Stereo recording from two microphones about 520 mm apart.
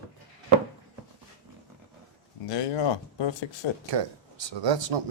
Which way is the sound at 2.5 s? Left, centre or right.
Left.